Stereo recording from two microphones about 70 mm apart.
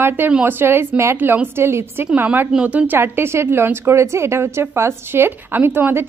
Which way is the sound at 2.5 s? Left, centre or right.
Right.